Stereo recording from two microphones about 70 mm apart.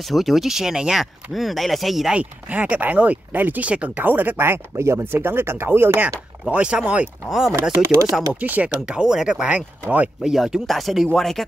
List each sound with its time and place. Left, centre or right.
0.1 s speech: centre
2.1 s speech: centre
6.5 s speech: centre
7.8 s speech: right
8.3 s speech: right
10.3 s speech: centre